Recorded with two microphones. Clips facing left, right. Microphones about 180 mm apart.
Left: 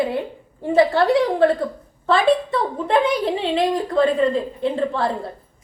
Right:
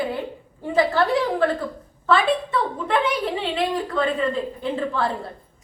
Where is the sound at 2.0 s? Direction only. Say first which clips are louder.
Left 3 dB; 30° left (ahead or behind).